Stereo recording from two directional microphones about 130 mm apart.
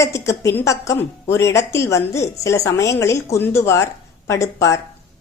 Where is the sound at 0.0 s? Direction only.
25° left (ahead or behind).